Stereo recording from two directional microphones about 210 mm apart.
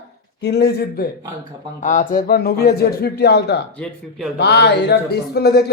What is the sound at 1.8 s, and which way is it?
Speech, 40° left (ahead or behind).